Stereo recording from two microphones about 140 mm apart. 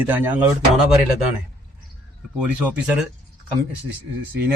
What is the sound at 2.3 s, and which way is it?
Speech, 10° right (ahead or behind).